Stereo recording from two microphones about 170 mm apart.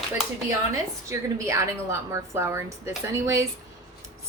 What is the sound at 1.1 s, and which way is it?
A woman's voice, 15° right (ahead or behind).